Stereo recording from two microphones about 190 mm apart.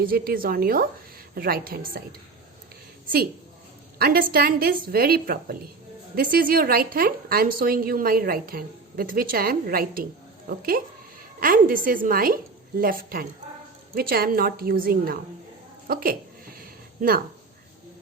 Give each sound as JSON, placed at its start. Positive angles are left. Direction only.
{"t": 0.0, "sound": "a woman's voice", "side_deg": -50}
{"t": 3.9, "sound": "a woman's voice", "side_deg": -50}
{"t": 15.9, "sound": "a sound", "side_deg": -50}